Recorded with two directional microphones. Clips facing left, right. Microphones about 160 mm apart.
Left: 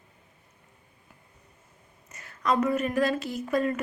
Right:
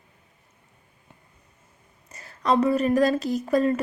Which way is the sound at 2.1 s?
35° right (ahead or behind).